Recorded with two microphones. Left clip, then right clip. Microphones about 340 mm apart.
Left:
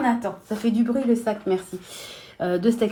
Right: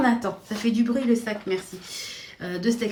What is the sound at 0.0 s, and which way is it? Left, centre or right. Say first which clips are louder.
Speech: even; centre.